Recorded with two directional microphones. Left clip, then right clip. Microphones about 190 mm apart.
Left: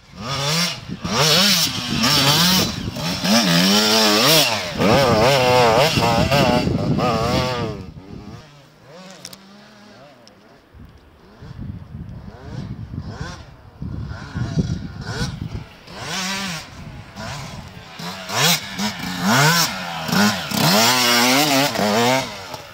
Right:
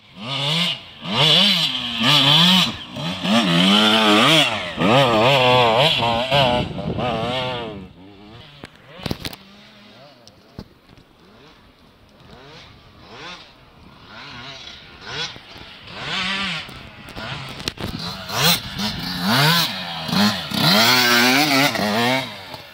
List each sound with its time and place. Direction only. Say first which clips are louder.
0.2 s chainsaw: even; 20° left (ahead or behind)
13.1 s vehicle: right 1 dB; 90° left
14.1 s sheep: left 4 dB; 85° left
15.9 s chainsaw: right 2 dB; 10° left (ahead or behind)
17.2 s a sound: right 1 dB; 5° left (ahead or behind)
17.9 s motorcycle: left 5 dB; 5° right (ahead or behind); by 21.6 s 15° left (ahead or behind)
21.6 s chainsaw: left 1 dB; 5° left (ahead or behind)